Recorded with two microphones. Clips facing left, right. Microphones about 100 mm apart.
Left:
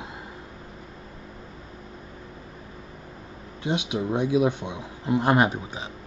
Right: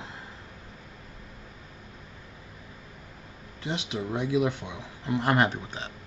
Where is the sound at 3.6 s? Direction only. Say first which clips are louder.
Left 5 dB; 20° left (ahead or behind).